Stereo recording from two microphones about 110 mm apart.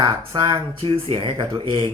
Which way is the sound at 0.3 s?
40° right (ahead or behind).